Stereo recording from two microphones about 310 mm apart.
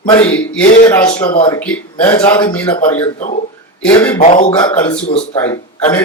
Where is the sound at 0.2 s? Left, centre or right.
Centre.